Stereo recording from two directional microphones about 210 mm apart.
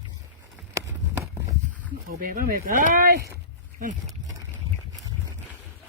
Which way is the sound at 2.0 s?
40° right (ahead or behind).